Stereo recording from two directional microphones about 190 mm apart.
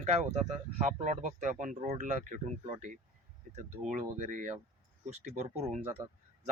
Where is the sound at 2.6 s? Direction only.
30° right (ahead or behind).